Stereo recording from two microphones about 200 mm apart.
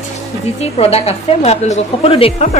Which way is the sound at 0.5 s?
30° left (ahead or behind).